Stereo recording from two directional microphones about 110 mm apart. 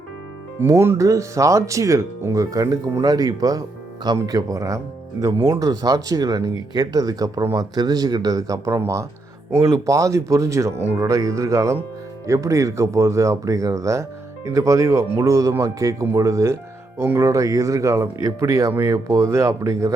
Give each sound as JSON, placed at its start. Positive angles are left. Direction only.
{"t": 0.6, "sound": "speech", "side_deg": -20}